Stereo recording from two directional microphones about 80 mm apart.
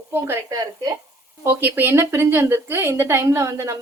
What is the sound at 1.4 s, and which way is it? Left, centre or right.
Speech, right.